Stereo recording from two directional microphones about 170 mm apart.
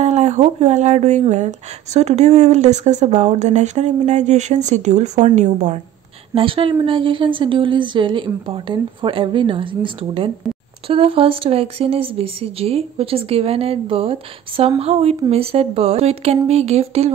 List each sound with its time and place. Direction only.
0.0 s speech: 40° right (ahead or behind)
6.3 s a woman's voice: 30° right (ahead or behind)